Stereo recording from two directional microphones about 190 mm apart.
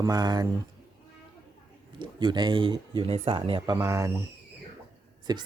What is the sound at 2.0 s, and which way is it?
Speech, 25° right (ahead or behind).